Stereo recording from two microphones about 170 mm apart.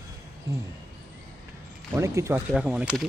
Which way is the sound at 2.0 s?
15° right (ahead or behind).